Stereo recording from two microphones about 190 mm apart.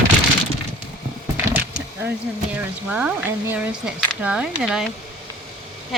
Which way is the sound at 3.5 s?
10° right (ahead or behind).